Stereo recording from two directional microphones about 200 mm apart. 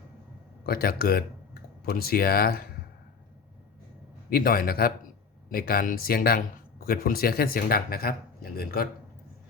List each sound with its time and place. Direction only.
0.6 s speech: 50° left (ahead or behind)
4.3 s speech: 45° left (ahead or behind)